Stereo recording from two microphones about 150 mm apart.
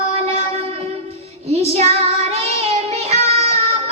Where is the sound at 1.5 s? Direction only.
45° right (ahead or behind).